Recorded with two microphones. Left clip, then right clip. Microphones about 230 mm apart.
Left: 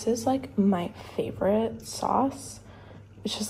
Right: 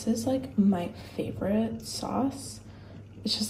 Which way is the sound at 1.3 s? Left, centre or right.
Left.